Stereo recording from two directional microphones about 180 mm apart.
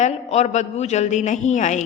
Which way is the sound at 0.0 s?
40° left (ahead or behind).